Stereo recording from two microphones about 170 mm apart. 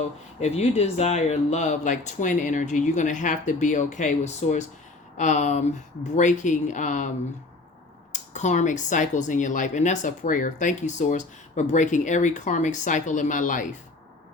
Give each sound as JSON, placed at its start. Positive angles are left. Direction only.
{"t": 0.3, "sound": "speech", "side_deg": 40}
{"t": 8.1, "sound": "speech", "side_deg": 45}